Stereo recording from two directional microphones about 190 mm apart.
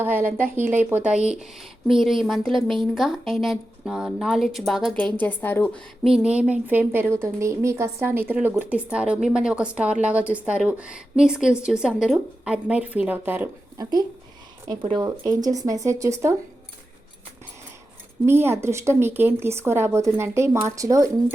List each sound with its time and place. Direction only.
0.0 s a woman's voice: 10° right (ahead or behind)
18.3 s speech: 10° right (ahead or behind)